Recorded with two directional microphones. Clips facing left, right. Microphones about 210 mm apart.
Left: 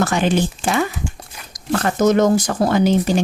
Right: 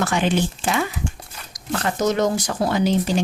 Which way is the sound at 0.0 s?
45° left (ahead or behind).